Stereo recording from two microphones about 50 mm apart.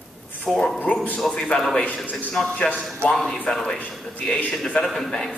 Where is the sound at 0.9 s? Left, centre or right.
Left.